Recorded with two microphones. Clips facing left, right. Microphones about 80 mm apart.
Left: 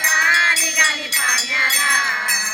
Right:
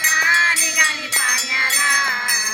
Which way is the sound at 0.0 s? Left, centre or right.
Centre.